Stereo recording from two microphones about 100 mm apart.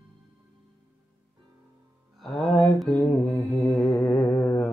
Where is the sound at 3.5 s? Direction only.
20° left (ahead or behind).